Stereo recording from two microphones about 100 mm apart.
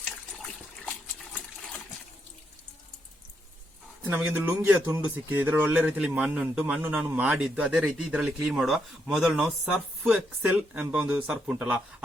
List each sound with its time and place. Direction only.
1.2 s water: 5° left (ahead or behind)
4.0 s speech: 15° right (ahead or behind)
10.1 s speech: 15° right (ahead or behind)